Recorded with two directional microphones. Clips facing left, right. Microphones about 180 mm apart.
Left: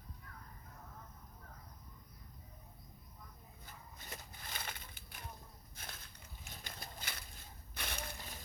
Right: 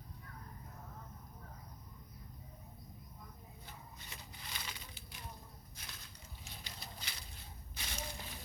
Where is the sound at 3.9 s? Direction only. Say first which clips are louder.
Left 2 dB; 50° left (ahead or behind).